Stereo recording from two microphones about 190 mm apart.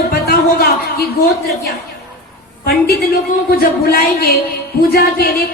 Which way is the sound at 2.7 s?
55° left (ahead or behind).